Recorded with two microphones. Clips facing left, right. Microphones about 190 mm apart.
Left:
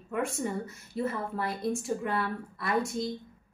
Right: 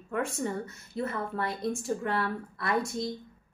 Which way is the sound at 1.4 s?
5° left (ahead or behind).